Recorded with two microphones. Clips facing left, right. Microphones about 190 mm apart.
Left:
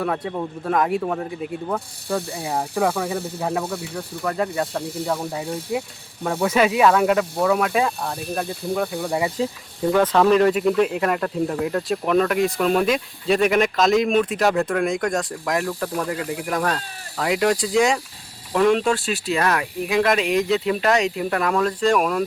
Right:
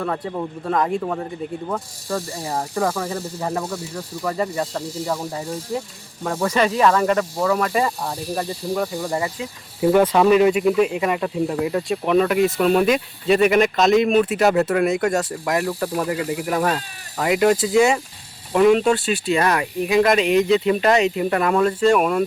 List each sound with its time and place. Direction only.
0.0 s speech: centre (ahead or behind)
4.8 s speech: 60° left (ahead or behind)
5.0 s speech: centre (ahead or behind)
9.9 s speech: 10° right (ahead or behind)